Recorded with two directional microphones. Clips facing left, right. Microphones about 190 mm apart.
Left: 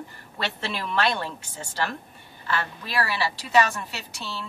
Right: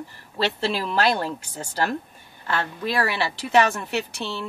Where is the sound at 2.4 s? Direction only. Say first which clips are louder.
Right 4 dB; 55° right (ahead or behind).